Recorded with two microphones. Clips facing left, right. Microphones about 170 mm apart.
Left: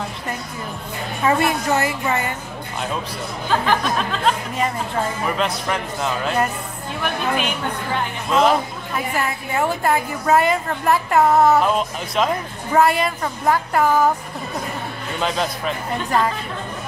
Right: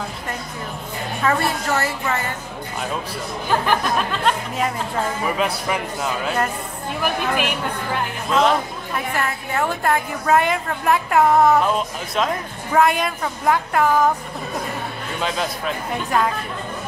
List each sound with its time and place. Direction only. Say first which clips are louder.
1.2 s a woman's voice: left 3 dB; 15° left (ahead or behind)
4.1 s a woman's voice: even; centre (ahead or behind)
6.2 s a woman's voice: left 1 dB; 5° left (ahead or behind)
12.7 s a woman's voice: left 1 dB; centre (ahead or behind)
15.1 s a woman's voice: left 2 dB; centre (ahead or behind)